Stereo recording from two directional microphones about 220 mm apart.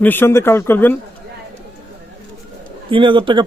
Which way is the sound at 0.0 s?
10° left (ahead or behind).